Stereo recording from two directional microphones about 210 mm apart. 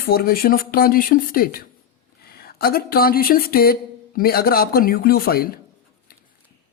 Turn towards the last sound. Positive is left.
turn(degrees=45)  # may be behind; listen again after turning